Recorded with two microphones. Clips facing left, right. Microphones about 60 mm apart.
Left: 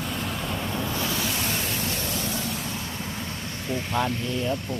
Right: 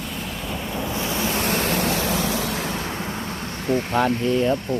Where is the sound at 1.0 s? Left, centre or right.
Right.